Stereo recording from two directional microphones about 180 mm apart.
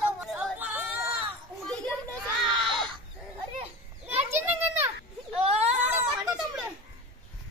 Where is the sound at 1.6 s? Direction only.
5° left (ahead or behind).